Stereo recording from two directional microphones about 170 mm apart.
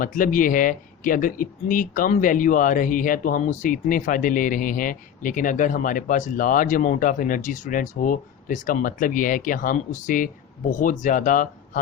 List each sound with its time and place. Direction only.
0.0 s speech: 50° left (ahead or behind)